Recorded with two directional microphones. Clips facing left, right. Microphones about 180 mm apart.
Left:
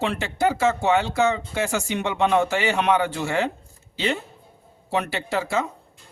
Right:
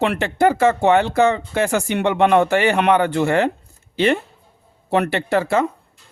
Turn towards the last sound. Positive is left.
turn(degrees=-55)  # may be behind; listen again after turning